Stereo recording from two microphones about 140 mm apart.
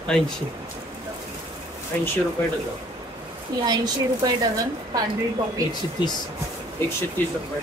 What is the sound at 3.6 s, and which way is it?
Speech, 30° right (ahead or behind).